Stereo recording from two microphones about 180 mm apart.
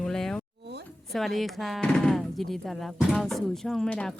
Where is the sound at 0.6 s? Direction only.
70° right (ahead or behind).